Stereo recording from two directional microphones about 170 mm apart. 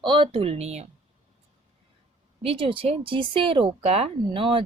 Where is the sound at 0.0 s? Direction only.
30° right (ahead or behind).